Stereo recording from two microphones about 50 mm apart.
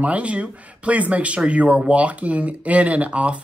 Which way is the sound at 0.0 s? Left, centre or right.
Right.